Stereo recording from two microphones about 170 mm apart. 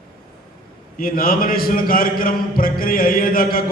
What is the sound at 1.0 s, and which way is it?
A man's voice, 55° left (ahead or behind).